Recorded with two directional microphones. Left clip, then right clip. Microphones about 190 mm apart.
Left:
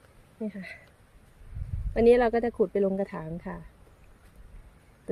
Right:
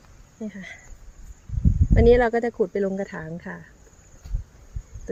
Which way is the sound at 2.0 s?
5° left (ahead or behind).